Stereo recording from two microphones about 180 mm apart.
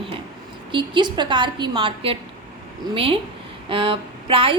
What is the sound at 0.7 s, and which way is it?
A woman's voice, 25° right (ahead or behind).